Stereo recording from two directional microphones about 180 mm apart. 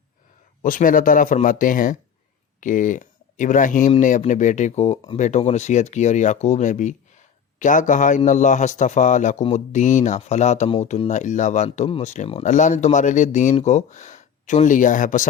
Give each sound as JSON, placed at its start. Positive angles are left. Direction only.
{"t": 0.6, "sound": "a man's voice", "side_deg": 45}